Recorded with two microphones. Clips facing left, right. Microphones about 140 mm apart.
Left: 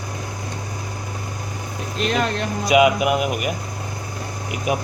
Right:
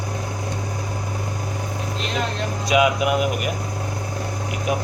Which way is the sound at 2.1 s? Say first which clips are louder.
Left 4 dB; 65° left (ahead or behind).